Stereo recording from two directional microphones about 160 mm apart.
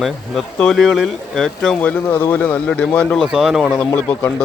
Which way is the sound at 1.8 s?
15° left (ahead or behind).